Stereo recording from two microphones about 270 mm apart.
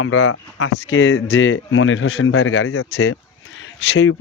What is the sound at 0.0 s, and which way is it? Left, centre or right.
Speech, left.